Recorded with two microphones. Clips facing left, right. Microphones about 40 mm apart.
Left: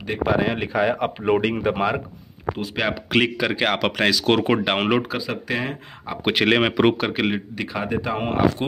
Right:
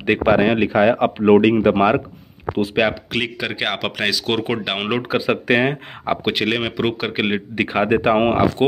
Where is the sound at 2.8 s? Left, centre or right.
Centre.